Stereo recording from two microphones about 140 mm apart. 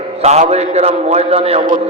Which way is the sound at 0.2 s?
50° right (ahead or behind).